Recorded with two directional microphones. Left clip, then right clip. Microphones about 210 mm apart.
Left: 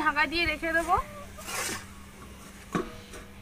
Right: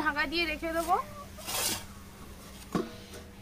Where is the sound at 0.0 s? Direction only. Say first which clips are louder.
Left 4 dB; 5° right (ahead or behind).